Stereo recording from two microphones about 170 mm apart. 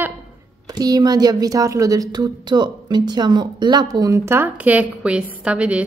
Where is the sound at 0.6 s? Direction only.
20° right (ahead or behind); by 5.9 s 5° right (ahead or behind).